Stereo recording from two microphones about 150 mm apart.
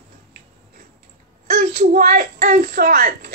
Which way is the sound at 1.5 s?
60° right (ahead or behind).